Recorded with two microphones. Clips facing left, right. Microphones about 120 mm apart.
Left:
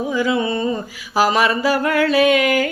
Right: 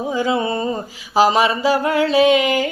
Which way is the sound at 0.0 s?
30° right (ahead or behind).